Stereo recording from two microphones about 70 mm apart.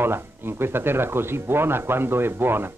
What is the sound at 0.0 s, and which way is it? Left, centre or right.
Speech, right.